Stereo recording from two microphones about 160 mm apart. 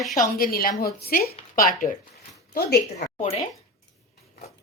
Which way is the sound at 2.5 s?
70° left (ahead or behind).